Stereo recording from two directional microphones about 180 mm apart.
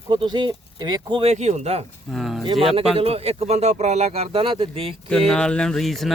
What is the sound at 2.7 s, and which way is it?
Speech, 35° right (ahead or behind).